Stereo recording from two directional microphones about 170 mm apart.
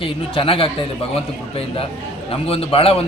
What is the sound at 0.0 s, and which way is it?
A man's voice, 30° left (ahead or behind).